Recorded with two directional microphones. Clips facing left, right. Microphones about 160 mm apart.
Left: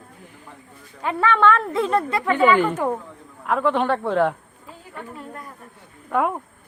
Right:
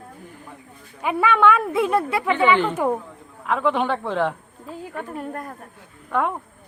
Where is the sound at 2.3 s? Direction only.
10° left (ahead or behind).